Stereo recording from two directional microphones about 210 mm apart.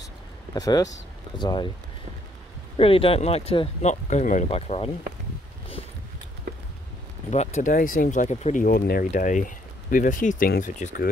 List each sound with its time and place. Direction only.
0.6 s speech: 15° left (ahead or behind)
2.8 s speech: 25° left (ahead or behind)
7.2 s speech: 35° left (ahead or behind)